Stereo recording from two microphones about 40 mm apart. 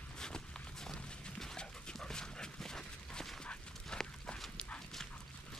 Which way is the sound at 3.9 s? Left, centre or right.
Centre.